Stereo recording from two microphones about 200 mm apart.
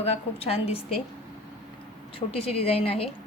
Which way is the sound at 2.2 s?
30° left (ahead or behind).